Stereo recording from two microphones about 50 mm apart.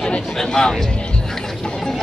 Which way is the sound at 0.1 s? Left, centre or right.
Centre.